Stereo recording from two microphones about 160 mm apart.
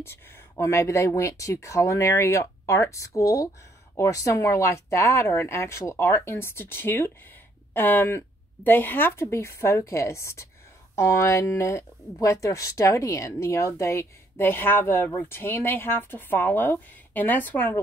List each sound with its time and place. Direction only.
0.0 s speech: 15° left (ahead or behind)